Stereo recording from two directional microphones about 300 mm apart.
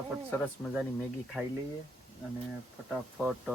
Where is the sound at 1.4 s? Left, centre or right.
Centre.